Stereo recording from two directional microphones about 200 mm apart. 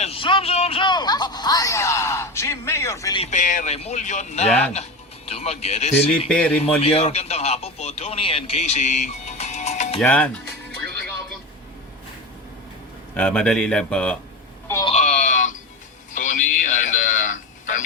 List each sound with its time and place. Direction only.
0.0 s a sound: 25° left (ahead or behind)
3.2 s a man's voice: 35° left (ahead or behind)
6.1 s speech: 5° left (ahead or behind)
6.8 s speech: 30° left (ahead or behind)
10.0 s speech: 5° left (ahead or behind)
13.1 s speech: 5° left (ahead or behind)
14.7 s sheep: 15° left (ahead or behind)
14.9 s sheep: 35° left (ahead or behind)
16.1 s a sound: 40° left (ahead or behind)